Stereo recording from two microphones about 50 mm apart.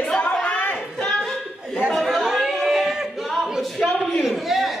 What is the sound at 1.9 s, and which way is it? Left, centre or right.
Chatter, centre.